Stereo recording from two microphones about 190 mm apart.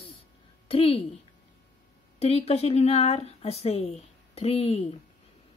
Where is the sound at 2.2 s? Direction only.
35° left (ahead or behind).